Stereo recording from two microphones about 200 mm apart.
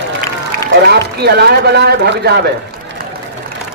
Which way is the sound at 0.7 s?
55° right (ahead or behind).